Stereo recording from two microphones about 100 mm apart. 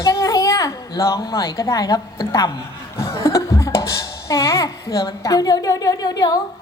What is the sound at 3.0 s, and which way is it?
Music, 30° left (ahead or behind).